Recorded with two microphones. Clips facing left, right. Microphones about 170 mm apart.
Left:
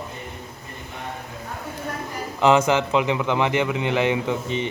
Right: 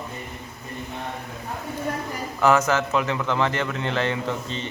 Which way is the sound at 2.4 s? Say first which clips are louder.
Left 2 dB; 15° left (ahead or behind).